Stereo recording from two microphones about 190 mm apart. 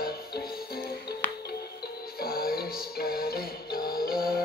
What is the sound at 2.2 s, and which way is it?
Music, 50° left (ahead or behind).